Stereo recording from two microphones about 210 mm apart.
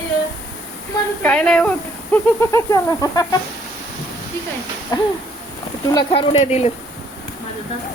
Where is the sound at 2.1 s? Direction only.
15° left (ahead or behind).